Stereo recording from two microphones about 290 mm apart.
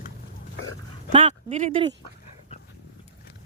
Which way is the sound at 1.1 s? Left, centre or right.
Right.